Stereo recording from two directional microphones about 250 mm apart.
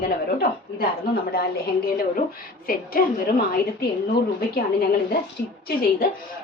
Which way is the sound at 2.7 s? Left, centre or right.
Left.